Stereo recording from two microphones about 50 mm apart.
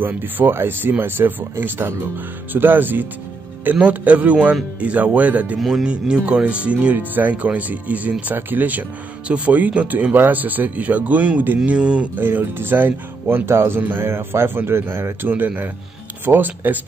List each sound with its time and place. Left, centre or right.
0.2 s a man's voice: right
3.9 s speech: right
5.6 s speech: centre
5.9 s a man's voice: centre
12.2 s speech: right
14.0 s a man's voice: right
15.2 s a man's voice: right